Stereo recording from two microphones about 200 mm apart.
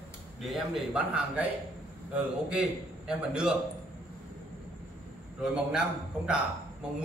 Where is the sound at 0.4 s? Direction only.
Centre (ahead or behind).